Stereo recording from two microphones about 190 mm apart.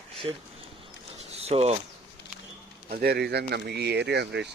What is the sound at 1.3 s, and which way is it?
Speech, 35° right (ahead or behind).